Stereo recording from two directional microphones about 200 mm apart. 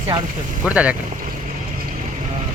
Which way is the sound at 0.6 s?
5° right (ahead or behind).